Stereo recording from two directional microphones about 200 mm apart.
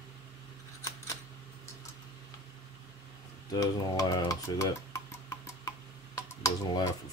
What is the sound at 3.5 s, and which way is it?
Stir, 20° left (ahead or behind).